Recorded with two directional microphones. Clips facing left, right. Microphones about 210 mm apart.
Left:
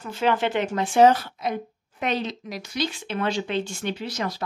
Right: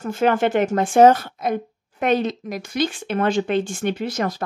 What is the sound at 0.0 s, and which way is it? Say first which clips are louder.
A woman's voice: right 5 dB; 50° right (ahead or behind).